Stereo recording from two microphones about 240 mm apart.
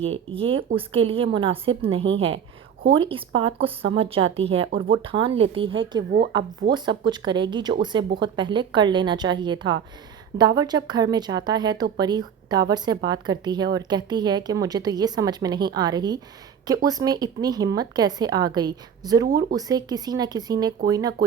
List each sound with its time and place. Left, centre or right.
0.0 s speech: right
6.1 s speech: right
6.7 s speech: centre
19.3 s speech: right
19.5 s speech: centre